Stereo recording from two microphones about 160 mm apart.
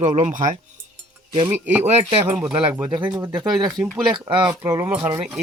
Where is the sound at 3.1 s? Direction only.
25° right (ahead or behind).